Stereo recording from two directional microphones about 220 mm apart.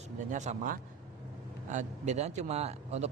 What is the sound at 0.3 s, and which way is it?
Speech, 35° right (ahead or behind).